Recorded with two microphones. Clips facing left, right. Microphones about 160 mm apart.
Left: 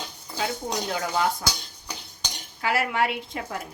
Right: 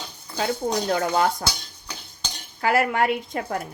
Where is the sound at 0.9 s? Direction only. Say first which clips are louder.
Right 4 dB; 50° right (ahead or behind).